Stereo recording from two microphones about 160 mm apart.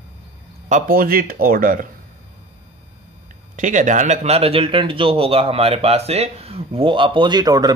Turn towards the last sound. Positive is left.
turn(degrees=-25)  # may be behind; listen again after turning